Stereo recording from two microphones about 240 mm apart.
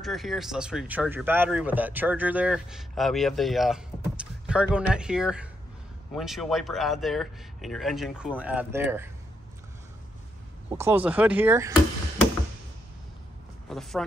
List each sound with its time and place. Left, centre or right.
0.0 s speech: centre
10.7 s speech: centre
13.7 s speech: centre